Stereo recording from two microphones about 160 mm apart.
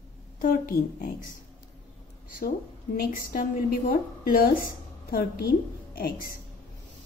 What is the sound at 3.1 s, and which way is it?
A woman's voice, 65° left (ahead or behind).